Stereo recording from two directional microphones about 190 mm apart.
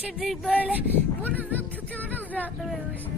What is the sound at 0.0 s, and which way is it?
Speech, centre (ahead or behind).